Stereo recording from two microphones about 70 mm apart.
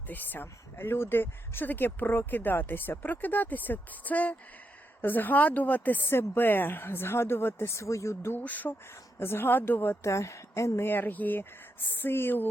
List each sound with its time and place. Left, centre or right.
0.1 s speech: left
8.4 s speech: left
9.1 s speech: left